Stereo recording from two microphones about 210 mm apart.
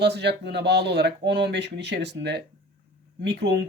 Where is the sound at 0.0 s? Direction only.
50° right (ahead or behind).